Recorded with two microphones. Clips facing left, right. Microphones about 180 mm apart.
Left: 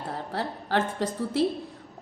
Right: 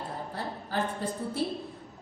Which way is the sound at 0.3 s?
90° left.